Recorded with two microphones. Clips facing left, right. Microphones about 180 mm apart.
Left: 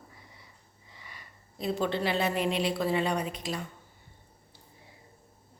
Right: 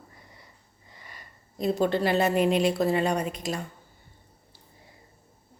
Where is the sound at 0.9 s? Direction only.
45° right (ahead or behind).